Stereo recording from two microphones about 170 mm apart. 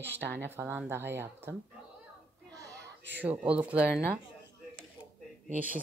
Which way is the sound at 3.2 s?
10° right (ahead or behind).